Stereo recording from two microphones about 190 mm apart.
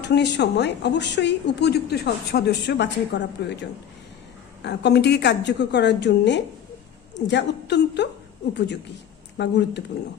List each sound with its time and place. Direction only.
0.0 s a woman's voice: 65° left (ahead or behind)